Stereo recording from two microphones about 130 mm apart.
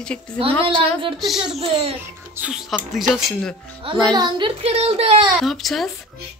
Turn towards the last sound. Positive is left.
turn(degrees=0)  # may be behind; listen again after turning